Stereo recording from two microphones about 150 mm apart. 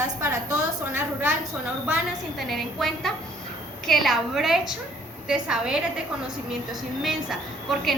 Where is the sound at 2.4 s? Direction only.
Centre (ahead or behind).